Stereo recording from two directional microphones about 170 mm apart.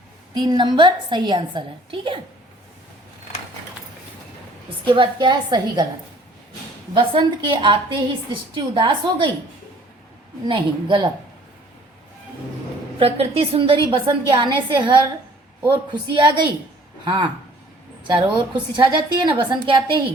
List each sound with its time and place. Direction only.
0.3 s a woman's voice: 25° right (ahead or behind)
4.9 s a woman's voice: 30° right (ahead or behind)
6.9 s a woman's voice: 30° right (ahead or behind)
10.4 s a woman's voice: 25° right (ahead or behind)
13.0 s a woman's voice: 35° right (ahead or behind)
18.7 s a woman's voice: 30° right (ahead or behind)